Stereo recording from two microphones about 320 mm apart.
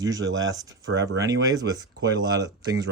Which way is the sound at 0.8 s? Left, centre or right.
Right.